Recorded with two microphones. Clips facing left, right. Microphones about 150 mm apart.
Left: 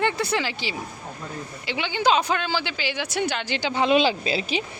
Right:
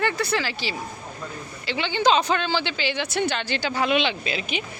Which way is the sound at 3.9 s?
35° left (ahead or behind).